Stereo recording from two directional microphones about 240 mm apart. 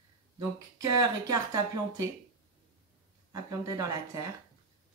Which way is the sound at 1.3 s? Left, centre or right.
Centre.